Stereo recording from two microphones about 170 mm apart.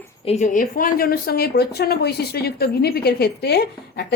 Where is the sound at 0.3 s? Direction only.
45° left (ahead or behind).